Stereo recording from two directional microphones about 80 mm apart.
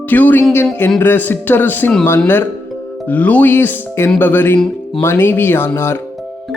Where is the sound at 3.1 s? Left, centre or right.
Centre.